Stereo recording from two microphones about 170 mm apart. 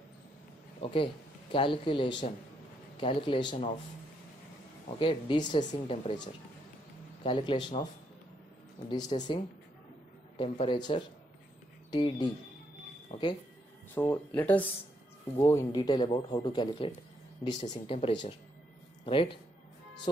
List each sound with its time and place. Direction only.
0.8 s speech: 30° left (ahead or behind)
4.8 s speech: 30° left (ahead or behind)
7.3 s speech: 35° left (ahead or behind)
8.9 s speech: 25° left (ahead or behind)
10.3 s speech: 35° left (ahead or behind)
13.9 s speech: 10° left (ahead or behind); by 19.3 s 30° left (ahead or behind)